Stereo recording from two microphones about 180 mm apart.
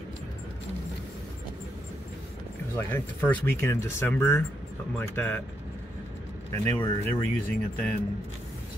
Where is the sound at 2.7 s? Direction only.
10° left (ahead or behind).